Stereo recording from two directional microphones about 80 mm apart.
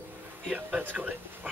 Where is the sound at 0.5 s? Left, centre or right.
Right.